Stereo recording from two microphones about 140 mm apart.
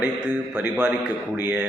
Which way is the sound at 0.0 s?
15° right (ahead or behind).